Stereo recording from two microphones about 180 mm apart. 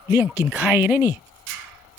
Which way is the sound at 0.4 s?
10° right (ahead or behind).